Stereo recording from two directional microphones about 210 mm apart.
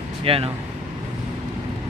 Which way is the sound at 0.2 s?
25° right (ahead or behind).